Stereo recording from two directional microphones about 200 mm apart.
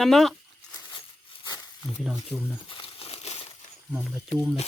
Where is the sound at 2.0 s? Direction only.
Centre (ahead or behind).